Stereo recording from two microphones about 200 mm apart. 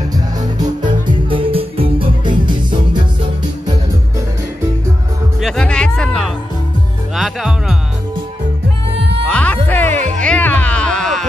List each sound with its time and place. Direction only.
1.3 s music: 25° right (ahead or behind)
5.4 s music: 5° left (ahead or behind)
9.3 s music: 5° left (ahead or behind)
9.9 s music: 35° right (ahead or behind)
10.2 s music: 5° left (ahead or behind)